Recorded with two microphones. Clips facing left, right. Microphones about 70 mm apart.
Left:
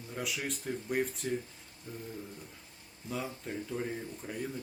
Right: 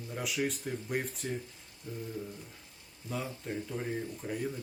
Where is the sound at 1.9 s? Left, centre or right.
Left.